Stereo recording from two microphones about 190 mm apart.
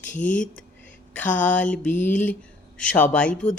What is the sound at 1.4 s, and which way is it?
Speech, 10° left (ahead or behind).